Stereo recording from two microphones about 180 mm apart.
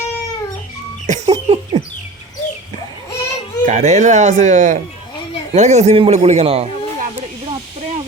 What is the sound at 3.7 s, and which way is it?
Speech, 40° right (ahead or behind).